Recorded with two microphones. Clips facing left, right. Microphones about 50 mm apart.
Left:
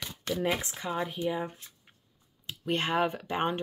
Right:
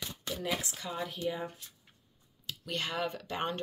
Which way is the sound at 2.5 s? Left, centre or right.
Left.